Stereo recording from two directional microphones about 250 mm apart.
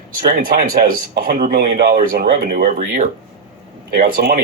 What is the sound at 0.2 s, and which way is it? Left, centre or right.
Speech, right.